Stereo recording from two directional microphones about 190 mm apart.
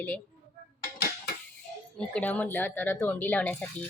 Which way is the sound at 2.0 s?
5° left (ahead or behind).